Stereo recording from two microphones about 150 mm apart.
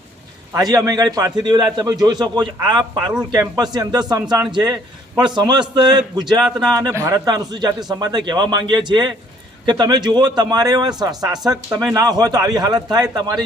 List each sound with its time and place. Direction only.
0.5 s a man's voice: 25° right (ahead or behind)